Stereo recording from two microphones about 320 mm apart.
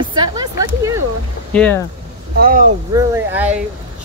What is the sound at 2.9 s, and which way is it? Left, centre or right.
Speech, centre.